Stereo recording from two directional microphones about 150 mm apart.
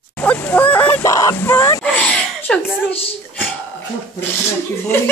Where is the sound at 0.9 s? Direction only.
20° left (ahead or behind).